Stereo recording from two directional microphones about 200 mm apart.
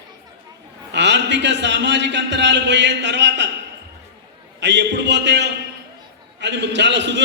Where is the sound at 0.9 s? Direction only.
60° right (ahead or behind).